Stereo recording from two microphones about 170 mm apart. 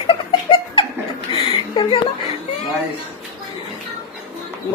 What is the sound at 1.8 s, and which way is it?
Chuckle, 30° left (ahead or behind).